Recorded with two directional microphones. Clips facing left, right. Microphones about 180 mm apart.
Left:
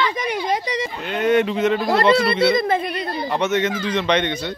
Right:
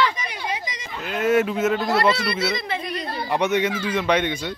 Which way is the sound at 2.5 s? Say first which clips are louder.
Left 9 dB; 50° left (ahead or behind).